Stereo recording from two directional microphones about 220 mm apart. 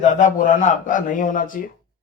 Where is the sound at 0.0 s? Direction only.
35° left (ahead or behind).